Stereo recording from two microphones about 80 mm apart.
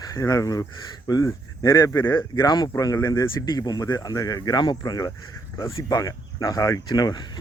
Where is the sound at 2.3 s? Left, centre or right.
Left.